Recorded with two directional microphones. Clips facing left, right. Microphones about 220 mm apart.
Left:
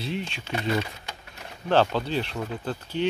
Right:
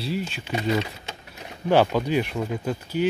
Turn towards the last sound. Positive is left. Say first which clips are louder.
# right 3 dB
turn(degrees=-10)  # may be behind; listen again after turning